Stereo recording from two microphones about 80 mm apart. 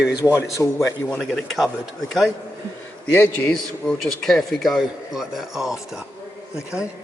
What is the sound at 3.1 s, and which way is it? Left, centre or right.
Speech, left.